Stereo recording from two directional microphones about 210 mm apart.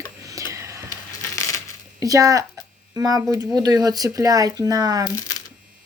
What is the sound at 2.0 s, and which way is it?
Speech, 15° right (ahead or behind).